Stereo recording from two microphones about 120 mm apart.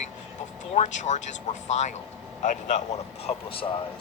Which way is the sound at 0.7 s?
85° left.